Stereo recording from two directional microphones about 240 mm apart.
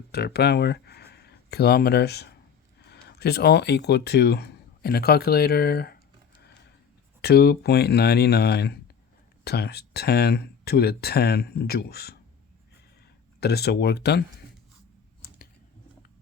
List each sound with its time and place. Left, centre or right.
0.1 s speech: left
7.2 s speech: left
13.4 s speech: left